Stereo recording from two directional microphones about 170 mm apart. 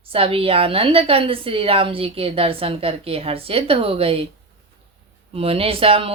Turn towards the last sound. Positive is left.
turn(degrees=-35)  # may be behind; listen again after turning